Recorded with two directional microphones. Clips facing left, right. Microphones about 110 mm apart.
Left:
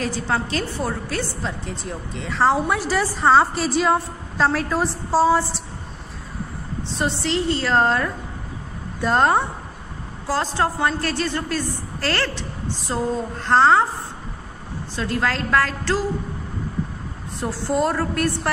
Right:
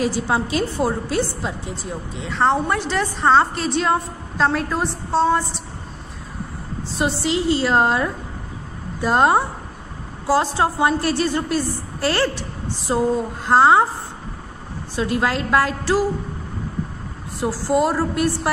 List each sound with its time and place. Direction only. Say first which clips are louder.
0.0 s a woman's voice: right 3 dB; 15° right (ahead or behind)
1.8 s a woman's voice: right 1 dB; centre (ahead or behind)
6.8 s a woman's voice: right 2 dB; 5° right (ahead or behind)
15.0 s a woman's voice: right 3 dB; 15° right (ahead or behind)
17.4 s a woman's voice: right 3 dB; 5° right (ahead or behind)